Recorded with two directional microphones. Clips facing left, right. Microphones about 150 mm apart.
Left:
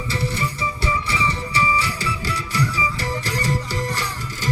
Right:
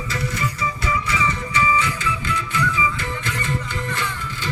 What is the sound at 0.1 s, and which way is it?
Music, 30° left (ahead or behind).